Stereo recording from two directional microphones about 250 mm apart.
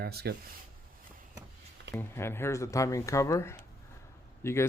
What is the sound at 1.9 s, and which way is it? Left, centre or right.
Speech, centre.